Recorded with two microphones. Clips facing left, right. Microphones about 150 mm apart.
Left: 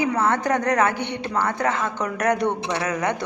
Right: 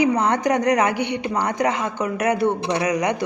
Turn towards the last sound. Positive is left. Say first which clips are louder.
# right 3 dB
turn(degrees=-15)  # may be behind; listen again after turning